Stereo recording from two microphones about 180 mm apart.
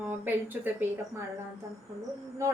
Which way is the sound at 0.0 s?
10° right (ahead or behind).